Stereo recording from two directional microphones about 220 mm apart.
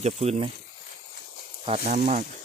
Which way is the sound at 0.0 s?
30° right (ahead or behind).